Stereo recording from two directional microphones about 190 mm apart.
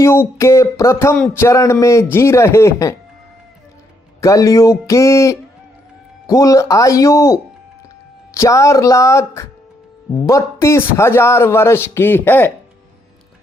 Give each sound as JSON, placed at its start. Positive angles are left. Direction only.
{"t": 0.0, "sound": "a man's voice", "side_deg": 15}
{"t": 4.2, "sound": "a man's voice", "side_deg": 15}